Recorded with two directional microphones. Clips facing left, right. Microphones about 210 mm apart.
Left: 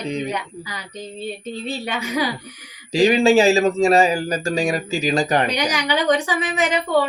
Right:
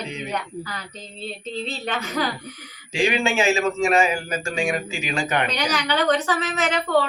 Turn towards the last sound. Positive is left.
turn(degrees=10)  # may be behind; listen again after turning